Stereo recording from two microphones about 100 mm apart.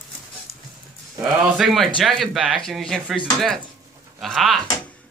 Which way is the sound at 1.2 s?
5° right (ahead or behind).